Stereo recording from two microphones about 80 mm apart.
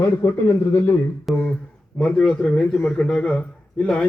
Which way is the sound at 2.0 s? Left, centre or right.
Centre.